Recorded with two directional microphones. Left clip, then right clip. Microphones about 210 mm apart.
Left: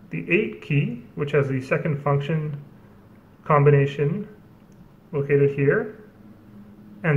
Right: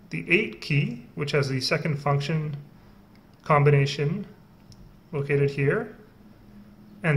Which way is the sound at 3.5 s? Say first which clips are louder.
Left 3 dB; 30° right (ahead or behind).